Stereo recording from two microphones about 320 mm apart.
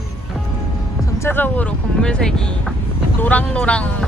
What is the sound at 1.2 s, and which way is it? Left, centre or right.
Speech, centre.